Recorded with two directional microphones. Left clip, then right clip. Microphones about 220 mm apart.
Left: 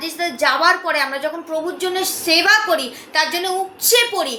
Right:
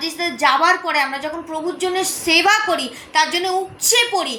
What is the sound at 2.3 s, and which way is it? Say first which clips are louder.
A woman's voice: left 1 dB; 15° left (ahead or behind).